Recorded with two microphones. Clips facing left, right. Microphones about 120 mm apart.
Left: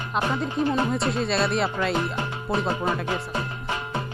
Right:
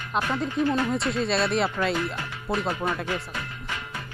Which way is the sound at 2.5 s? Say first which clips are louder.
Left 1 dB; 25° left (ahead or behind).